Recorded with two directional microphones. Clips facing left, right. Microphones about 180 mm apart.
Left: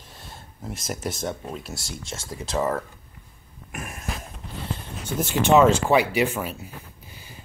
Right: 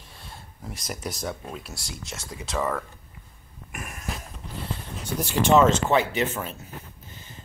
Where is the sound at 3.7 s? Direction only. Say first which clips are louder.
Left 3 dB; centre (ahead or behind).